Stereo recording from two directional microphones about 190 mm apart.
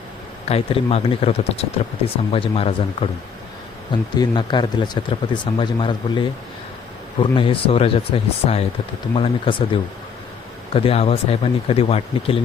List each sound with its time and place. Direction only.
0.4 s speech: 30° left (ahead or behind)
4.1 s speech: 25° left (ahead or behind)